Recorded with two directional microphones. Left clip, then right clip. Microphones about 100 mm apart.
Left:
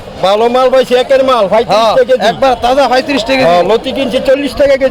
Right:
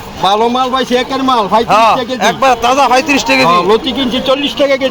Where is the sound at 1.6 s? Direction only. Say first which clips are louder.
Left 1 dB; 20° left (ahead or behind).